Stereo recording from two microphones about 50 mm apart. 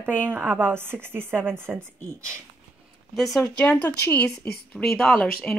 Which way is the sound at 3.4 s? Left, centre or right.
Left.